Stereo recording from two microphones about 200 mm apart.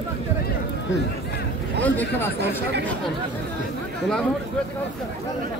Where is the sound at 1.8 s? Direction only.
10° left (ahead or behind).